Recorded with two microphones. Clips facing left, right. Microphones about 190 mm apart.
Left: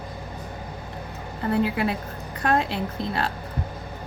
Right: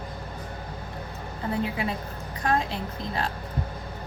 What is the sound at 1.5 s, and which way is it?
Speech, 70° left (ahead or behind).